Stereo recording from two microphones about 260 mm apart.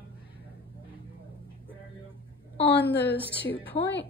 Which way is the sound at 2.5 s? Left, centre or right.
Left.